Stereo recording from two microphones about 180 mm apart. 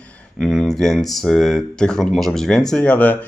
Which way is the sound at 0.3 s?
5° left (ahead or behind).